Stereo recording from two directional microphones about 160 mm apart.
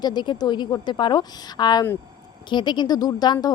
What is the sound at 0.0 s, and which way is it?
A woman's voice, 25° left (ahead or behind).